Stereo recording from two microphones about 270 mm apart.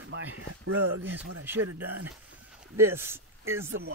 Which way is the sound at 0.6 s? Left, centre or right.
Right.